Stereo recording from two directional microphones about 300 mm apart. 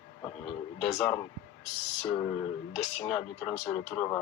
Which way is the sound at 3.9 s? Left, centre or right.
Centre.